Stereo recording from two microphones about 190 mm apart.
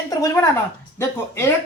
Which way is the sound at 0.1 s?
15° left (ahead or behind).